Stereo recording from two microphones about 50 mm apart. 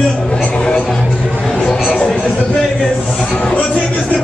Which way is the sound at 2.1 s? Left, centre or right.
Centre.